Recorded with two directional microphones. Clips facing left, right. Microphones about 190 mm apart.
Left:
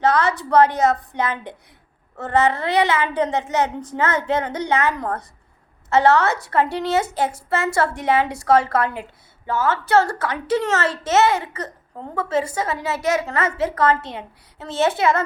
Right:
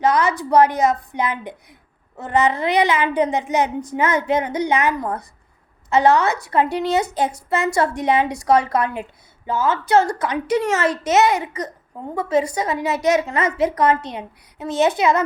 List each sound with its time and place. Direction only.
0.0 s a woman's voice: 10° right (ahead or behind)